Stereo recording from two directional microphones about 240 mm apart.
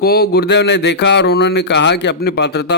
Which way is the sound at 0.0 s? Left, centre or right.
Left.